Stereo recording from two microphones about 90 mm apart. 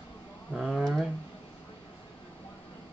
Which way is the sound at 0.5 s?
Centre (ahead or behind).